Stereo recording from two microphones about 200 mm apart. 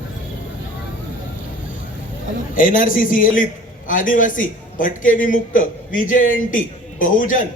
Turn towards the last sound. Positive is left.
turn(degrees=40)  # may be behind; listen again after turning